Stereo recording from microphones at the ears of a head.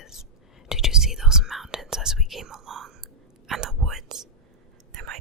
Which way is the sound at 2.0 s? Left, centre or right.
Right.